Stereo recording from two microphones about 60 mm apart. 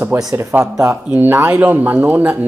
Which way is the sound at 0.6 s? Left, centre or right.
Right.